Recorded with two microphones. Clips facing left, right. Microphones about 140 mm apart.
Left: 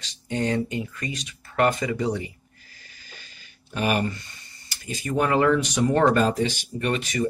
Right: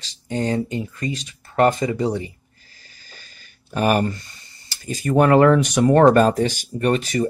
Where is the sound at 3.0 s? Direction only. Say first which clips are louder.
Right 1 dB; 40° right (ahead or behind).